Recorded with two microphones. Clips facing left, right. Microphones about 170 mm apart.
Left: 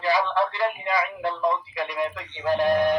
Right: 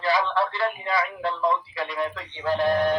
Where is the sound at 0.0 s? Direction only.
15° left (ahead or behind).